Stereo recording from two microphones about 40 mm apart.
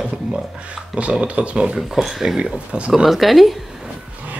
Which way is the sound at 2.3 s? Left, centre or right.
Right.